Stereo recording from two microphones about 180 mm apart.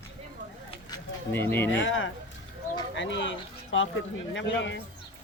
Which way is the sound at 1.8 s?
90° left.